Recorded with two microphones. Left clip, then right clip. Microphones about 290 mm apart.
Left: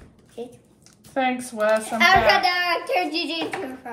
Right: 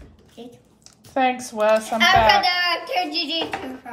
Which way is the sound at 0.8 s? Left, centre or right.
Centre.